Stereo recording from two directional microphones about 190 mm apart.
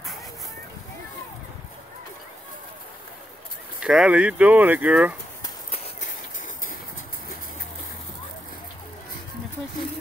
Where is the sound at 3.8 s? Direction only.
5° right (ahead or behind).